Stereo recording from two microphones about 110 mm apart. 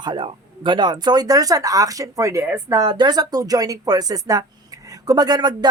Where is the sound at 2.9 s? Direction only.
40° right (ahead or behind).